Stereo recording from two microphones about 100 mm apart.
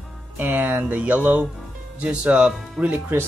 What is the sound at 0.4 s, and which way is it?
Speech, 20° right (ahead or behind).